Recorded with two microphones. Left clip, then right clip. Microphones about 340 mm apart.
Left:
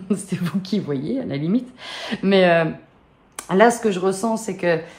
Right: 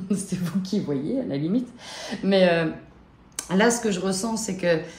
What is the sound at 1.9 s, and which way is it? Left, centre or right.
Speech, centre.